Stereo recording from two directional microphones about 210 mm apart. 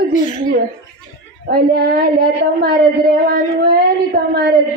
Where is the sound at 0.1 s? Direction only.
35° left (ahead or behind).